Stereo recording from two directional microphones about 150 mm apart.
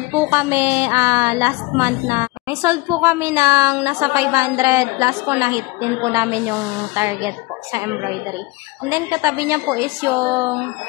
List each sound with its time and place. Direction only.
0.1 s a woman's voice: 15° right (ahead or behind)